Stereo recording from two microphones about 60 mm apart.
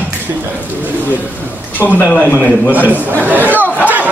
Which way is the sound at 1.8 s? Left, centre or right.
Left.